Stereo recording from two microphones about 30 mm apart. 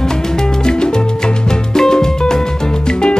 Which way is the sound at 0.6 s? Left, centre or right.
Left.